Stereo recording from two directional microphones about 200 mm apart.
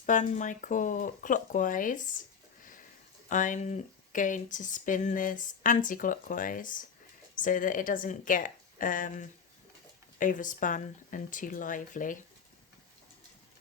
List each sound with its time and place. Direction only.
0.0 s speech: 40° left (ahead or behind)
3.2 s speech: 40° left (ahead or behind)